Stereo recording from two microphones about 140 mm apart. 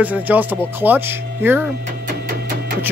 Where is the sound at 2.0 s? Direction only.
90° right.